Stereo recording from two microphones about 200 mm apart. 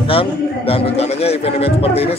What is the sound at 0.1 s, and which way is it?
A man's voice, 30° left (ahead or behind).